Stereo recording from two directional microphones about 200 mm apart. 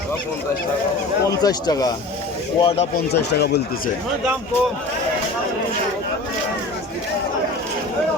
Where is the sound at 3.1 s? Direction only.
55° left (ahead or behind).